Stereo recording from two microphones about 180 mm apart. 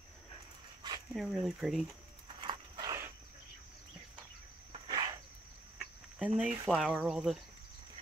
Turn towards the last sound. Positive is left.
turn(degrees=-5)  # may be behind; listen again after turning